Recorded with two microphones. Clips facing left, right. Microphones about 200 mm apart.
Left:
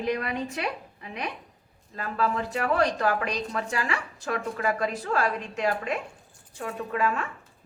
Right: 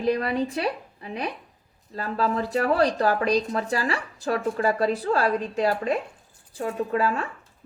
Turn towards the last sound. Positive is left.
turn(degrees=-35)  # may be behind; listen again after turning